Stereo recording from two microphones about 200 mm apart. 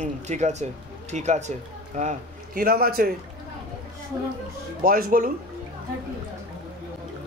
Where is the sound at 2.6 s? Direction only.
50° right (ahead or behind).